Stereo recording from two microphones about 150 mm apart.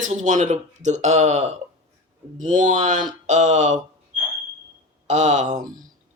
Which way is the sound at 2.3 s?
60° right (ahead or behind).